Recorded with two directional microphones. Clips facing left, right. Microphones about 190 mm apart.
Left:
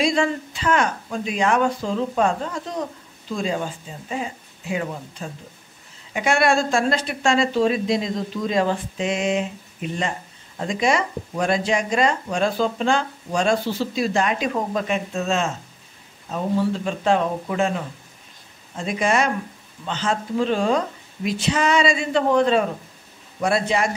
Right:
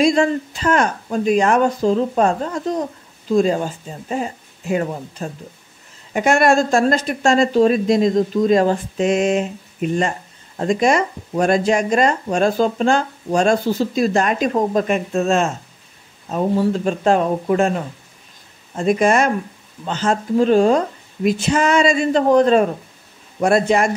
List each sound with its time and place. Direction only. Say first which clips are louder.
0.0 s speech: right 5 dB; 45° right (ahead or behind)
18.8 s speech: right 6 dB; 45° right (ahead or behind)